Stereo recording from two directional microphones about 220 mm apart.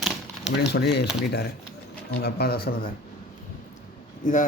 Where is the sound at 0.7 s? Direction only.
50° left (ahead or behind).